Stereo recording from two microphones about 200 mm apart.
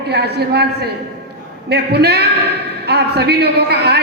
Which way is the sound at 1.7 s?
55° right (ahead or behind).